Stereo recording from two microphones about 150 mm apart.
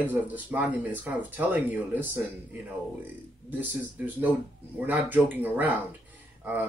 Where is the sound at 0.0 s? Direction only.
10° right (ahead or behind).